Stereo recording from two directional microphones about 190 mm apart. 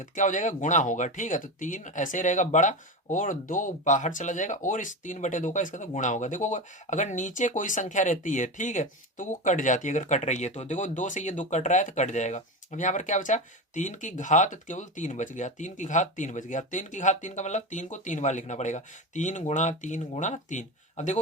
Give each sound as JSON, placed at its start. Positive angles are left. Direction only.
{"t": 0.0, "sound": "speech", "side_deg": 40}